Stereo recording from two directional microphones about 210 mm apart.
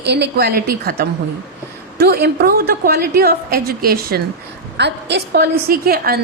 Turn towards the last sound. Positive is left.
turn(degrees=-45)  # may be behind; listen again after turning